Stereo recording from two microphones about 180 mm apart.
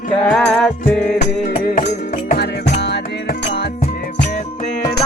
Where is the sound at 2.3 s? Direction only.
65° left (ahead or behind).